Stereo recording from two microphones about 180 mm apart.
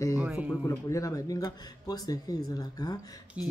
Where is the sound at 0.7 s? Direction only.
20° left (ahead or behind).